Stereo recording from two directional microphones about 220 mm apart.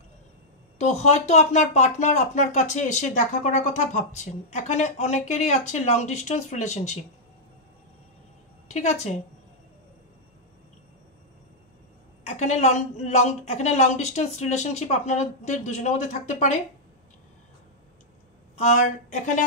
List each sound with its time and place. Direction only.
0.7 s speech: 30° left (ahead or behind)
8.6 s a woman's voice: 30° left (ahead or behind)
12.3 s speech: 30° left (ahead or behind)
18.6 s speech: 35° left (ahead or behind)